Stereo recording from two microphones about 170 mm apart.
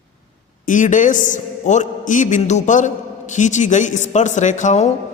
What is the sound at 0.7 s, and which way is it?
A man's voice, 50° left (ahead or behind).